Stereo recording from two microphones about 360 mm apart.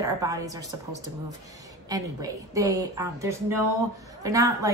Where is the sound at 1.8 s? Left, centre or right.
Centre.